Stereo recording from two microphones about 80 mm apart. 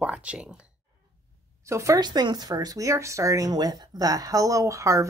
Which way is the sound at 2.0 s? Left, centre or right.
Right.